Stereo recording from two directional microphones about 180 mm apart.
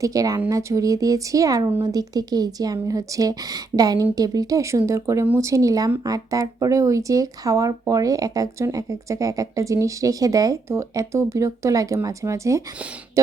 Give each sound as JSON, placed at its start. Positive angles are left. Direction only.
{"t": 0.0, "sound": "speech", "side_deg": -20}